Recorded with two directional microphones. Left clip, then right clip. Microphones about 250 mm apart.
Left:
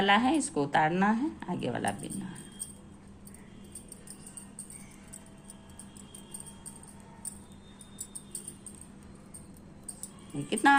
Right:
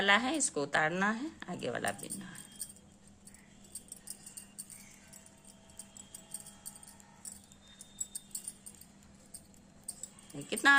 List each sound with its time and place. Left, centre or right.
0.0 s a woman's voice: centre
10.5 s a woman's voice: centre